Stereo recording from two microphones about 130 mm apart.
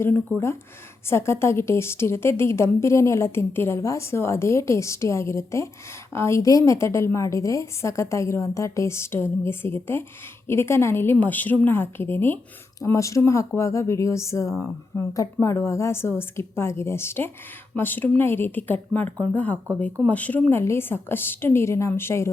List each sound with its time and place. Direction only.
0.0 s a woman's voice: 15° left (ahead or behind)